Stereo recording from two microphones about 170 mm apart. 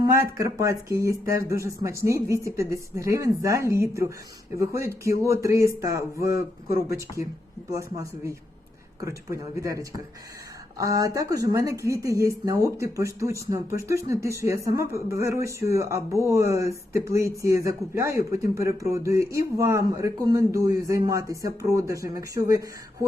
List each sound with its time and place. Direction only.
0.0 s speech: 15° right (ahead or behind)